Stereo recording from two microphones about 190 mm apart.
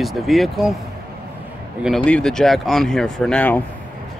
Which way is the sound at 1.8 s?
5° left (ahead or behind).